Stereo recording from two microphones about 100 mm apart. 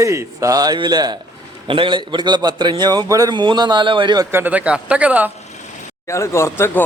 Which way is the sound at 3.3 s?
50° right (ahead or behind).